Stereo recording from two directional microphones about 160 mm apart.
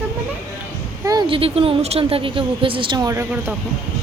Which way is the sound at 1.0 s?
25° right (ahead or behind).